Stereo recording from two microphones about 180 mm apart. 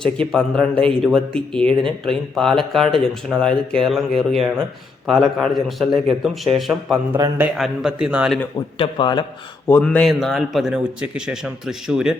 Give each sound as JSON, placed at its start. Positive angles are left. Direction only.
{"t": 0.0, "sound": "speech", "side_deg": 5}
{"t": 8.5, "sound": "speech", "side_deg": 25}
{"t": 9.6, "sound": "speech", "side_deg": 10}